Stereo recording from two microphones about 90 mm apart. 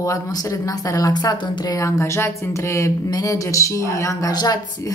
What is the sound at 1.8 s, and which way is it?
Speech, 35° left (ahead or behind).